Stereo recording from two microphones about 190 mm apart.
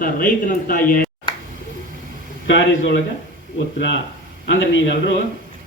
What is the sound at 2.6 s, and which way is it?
Speech, 70° left (ahead or behind).